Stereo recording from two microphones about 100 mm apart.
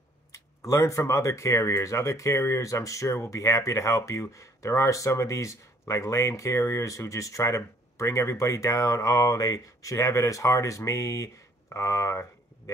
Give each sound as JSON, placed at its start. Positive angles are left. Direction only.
{"t": 0.3, "sound": "speech", "side_deg": 30}